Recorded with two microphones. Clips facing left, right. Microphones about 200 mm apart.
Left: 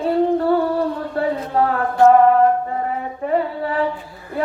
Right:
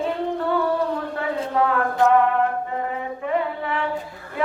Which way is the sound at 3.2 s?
35° left (ahead or behind).